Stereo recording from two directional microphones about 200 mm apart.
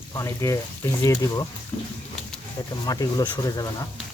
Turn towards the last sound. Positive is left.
turn(degrees=15)  # may be behind; listen again after turning